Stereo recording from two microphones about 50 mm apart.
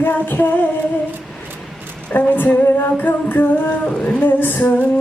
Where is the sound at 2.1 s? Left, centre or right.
Left.